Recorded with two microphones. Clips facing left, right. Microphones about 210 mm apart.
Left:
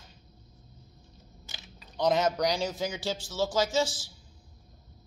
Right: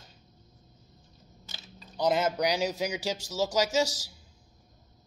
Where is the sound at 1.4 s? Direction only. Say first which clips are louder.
Right 1 dB; 15° left (ahead or behind).